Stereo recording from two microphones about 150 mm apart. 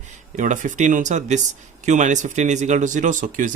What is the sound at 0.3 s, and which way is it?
Speech, 55° right (ahead or behind).